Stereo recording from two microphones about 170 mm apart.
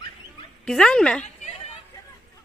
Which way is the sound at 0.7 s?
5° left (ahead or behind).